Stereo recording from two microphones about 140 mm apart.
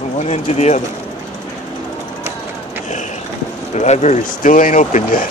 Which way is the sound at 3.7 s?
55° left (ahead or behind).